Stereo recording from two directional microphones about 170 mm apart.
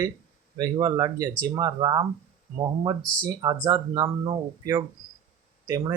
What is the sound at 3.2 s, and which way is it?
Speech, 20° right (ahead or behind).